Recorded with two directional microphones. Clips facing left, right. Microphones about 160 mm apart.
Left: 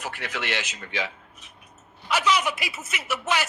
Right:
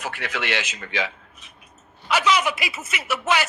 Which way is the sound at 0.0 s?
90° right.